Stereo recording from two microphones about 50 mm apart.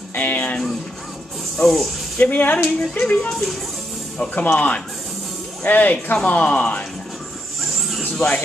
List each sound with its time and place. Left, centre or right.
0.1 s a sound: left
1.6 s speech: centre
2.1 s speech: left
3.2 s speech: centre
4.2 s speech: left
8.0 s music: centre